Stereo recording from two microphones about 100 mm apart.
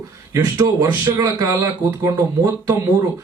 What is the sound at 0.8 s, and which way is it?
A man's voice, 35° right (ahead or behind).